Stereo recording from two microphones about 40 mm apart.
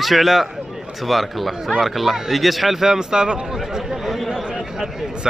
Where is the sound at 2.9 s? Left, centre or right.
Centre.